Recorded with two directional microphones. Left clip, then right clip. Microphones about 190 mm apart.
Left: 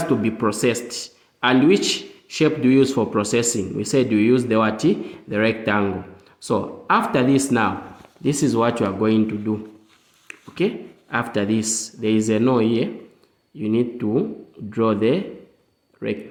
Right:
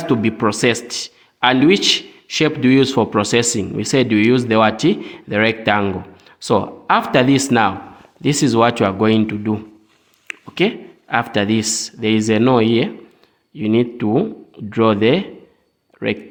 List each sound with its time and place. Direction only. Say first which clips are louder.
0.0 s a man's voice: right 3 dB; 30° right (ahead or behind)